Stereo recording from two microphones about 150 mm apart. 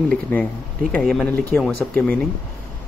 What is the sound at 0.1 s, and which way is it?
Speech, 10° left (ahead or behind).